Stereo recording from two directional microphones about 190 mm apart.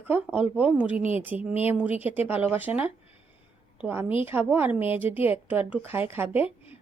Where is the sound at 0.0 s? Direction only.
10° right (ahead or behind).